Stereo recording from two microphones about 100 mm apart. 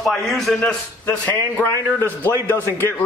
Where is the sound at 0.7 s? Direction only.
15° left (ahead or behind).